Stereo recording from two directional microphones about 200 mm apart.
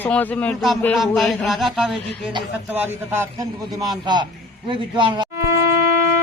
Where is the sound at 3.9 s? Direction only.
20° right (ahead or behind).